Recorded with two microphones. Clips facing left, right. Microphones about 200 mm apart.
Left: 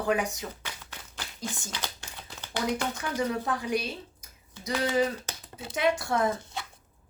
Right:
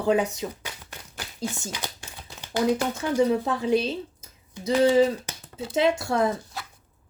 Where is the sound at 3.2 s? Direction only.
25° right (ahead or behind).